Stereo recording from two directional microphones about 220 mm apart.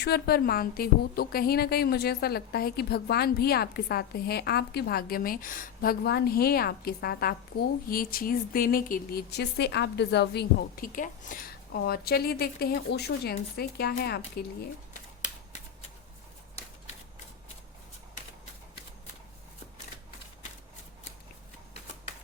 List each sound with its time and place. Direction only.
0.0 s a woman's voice: 45° left (ahead or behind)